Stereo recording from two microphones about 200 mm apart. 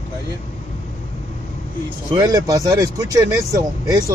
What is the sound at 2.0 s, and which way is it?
Speech, 20° right (ahead or behind).